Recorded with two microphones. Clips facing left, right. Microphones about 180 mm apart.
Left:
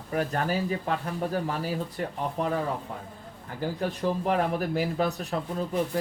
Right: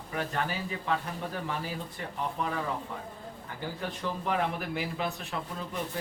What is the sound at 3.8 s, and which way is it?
Speech, 40° left (ahead or behind).